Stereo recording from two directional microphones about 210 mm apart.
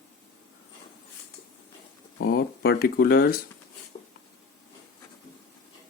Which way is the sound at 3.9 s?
30° left (ahead or behind).